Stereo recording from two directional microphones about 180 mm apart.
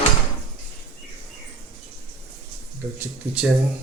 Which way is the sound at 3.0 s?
5° right (ahead or behind).